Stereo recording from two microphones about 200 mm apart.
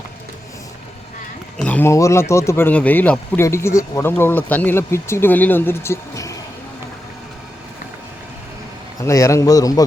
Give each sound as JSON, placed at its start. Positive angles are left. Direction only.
{"t": 1.5, "sound": "speech", "side_deg": 5}
{"t": 9.0, "sound": "speech", "side_deg": 15}